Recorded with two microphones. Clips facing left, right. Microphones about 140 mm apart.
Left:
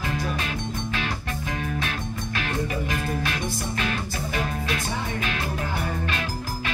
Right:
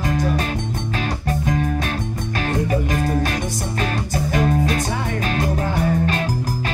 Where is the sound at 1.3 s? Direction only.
40° right (ahead or behind).